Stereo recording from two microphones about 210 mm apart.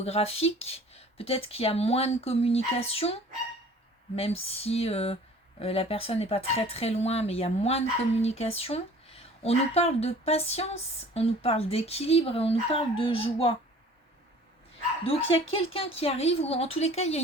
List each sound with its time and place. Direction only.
0.0 s speech: 30° left (ahead or behind)
15.4 s speech: 25° left (ahead or behind)